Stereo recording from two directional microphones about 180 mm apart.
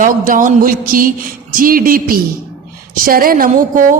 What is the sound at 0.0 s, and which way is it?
Speech, 50° right (ahead or behind).